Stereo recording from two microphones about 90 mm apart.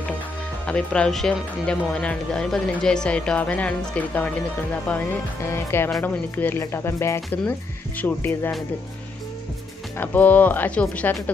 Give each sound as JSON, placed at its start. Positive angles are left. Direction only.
{"t": 0.7, "sound": "speech", "side_deg": 10}
{"t": 9.9, "sound": "speech", "side_deg": 20}